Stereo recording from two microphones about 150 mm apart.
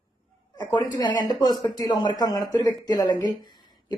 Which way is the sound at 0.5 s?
30° left (ahead or behind).